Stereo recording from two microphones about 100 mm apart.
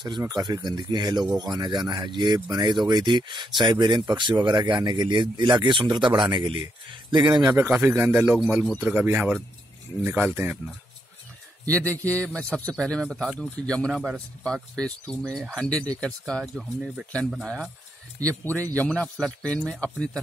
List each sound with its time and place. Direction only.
0.3 s speech: 45° right (ahead or behind)
7.5 s speech: 25° right (ahead or behind)
11.7 s speech: 15° left (ahead or behind)
13.9 s speech: 5° right (ahead or behind)
14.4 s speech: 10° left (ahead or behind)
18.4 s speech: 15° left (ahead or behind)